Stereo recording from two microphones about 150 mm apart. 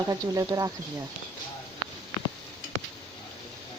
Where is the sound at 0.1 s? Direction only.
25° right (ahead or behind).